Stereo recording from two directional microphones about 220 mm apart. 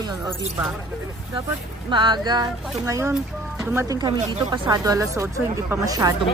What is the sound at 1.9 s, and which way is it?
Speech, 20° right (ahead or behind).